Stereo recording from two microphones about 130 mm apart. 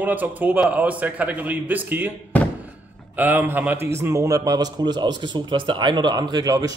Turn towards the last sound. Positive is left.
turn(degrees=-30)  # may be behind; listen again after turning